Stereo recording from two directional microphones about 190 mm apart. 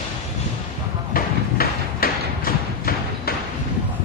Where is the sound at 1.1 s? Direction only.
50° left (ahead or behind).